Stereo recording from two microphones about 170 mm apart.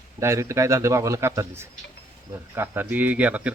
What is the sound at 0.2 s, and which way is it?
A man's voice, 15° right (ahead or behind).